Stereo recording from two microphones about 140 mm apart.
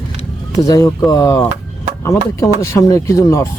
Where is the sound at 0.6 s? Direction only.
25° left (ahead or behind).